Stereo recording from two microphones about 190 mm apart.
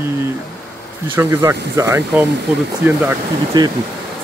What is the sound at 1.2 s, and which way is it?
Speech, 10° right (ahead or behind).